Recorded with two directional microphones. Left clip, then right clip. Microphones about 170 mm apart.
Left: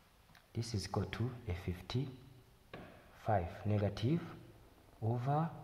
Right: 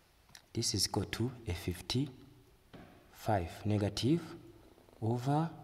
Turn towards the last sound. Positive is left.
turn(degrees=-20)  # may be behind; listen again after turning